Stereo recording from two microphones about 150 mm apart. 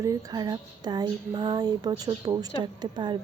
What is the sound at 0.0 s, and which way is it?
Speech, 25° right (ahead or behind).